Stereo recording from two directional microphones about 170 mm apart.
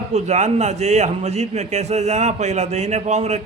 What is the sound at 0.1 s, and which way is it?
A man's voice, 45° right (ahead or behind).